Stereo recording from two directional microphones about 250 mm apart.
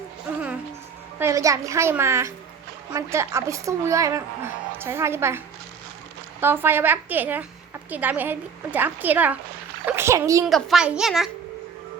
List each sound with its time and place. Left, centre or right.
1.2 s a woman's voice: centre
6.4 s a woman's voice: centre
9.8 s a sound: centre
10.4 s a child's voice: centre